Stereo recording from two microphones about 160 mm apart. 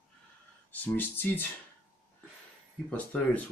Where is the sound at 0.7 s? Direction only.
10° left (ahead or behind).